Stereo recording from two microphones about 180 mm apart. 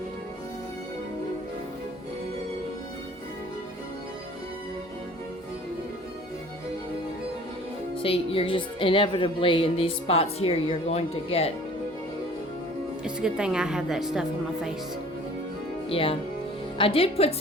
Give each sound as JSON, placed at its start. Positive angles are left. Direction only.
{"t": 8.0, "sound": "speech", "side_deg": 30}
{"t": 13.1, "sound": "a woman's voice", "side_deg": -5}
{"t": 15.9, "sound": "speech", "side_deg": 30}